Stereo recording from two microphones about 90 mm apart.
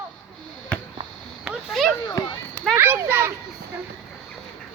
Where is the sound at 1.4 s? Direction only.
5° right (ahead or behind).